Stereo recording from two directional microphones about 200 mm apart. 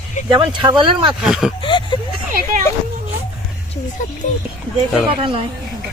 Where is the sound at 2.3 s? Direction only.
45° right (ahead or behind).